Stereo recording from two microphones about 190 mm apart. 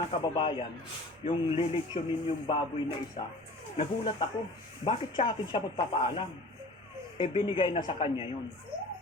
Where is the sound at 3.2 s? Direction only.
30° left (ahead or behind).